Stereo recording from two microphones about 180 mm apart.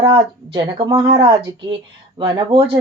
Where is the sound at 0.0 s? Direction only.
25° right (ahead or behind).